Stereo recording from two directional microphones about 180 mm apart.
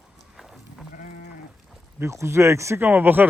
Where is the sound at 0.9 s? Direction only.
50° left (ahead or behind).